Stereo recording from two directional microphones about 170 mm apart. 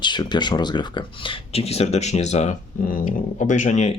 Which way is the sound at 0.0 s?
25° left (ahead or behind).